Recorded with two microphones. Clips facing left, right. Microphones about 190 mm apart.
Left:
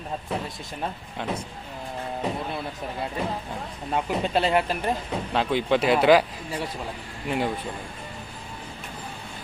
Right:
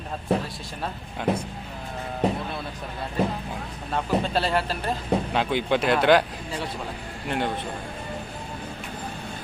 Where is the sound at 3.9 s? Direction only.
15° left (ahead or behind).